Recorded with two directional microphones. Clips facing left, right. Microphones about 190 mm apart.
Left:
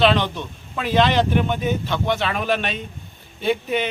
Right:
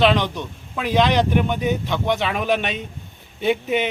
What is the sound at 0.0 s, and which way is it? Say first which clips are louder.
A man's voice: even; 15° right (ahead or behind).